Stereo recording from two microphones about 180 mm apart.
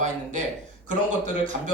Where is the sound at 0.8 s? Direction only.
45° right (ahead or behind).